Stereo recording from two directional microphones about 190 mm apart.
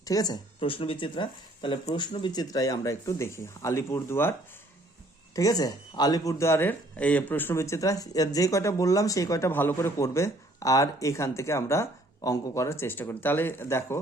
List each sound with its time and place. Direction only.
0.0 s speech: 20° left (ahead or behind)